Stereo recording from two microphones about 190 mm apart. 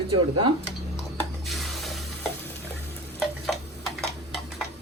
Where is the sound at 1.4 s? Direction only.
Centre (ahead or behind).